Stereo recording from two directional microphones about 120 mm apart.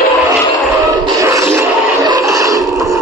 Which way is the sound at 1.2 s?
25° right (ahead or behind).